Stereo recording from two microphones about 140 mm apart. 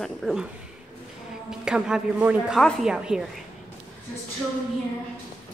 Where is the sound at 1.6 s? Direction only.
5° right (ahead or behind).